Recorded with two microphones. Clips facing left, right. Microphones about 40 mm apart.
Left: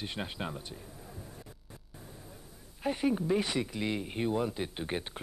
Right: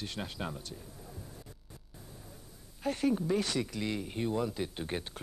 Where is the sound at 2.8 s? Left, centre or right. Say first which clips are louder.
Left 1 dB; centre.